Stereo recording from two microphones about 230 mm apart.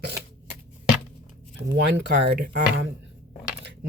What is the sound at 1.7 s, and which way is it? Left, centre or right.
A woman's voice, right.